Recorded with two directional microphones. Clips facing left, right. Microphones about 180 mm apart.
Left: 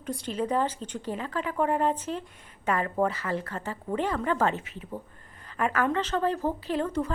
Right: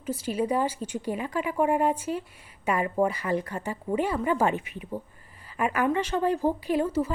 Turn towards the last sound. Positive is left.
turn(degrees=-5)  # may be behind; listen again after turning